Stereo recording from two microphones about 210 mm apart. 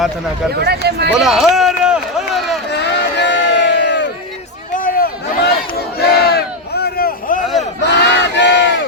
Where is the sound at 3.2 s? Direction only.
55° left (ahead or behind).